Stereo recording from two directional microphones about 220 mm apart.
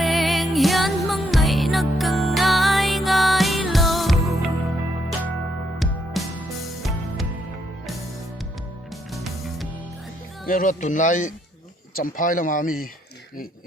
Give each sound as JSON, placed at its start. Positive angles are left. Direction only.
{"t": 0.0, "sound": "music", "side_deg": 0}
{"t": 5.8, "sound": "music", "side_deg": 0}
{"t": 9.1, "sound": "music", "side_deg": 0}
{"t": 10.4, "sound": "speech", "side_deg": 40}